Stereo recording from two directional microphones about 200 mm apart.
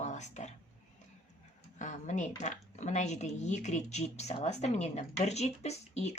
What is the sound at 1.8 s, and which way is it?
Speech, 35° left (ahead or behind).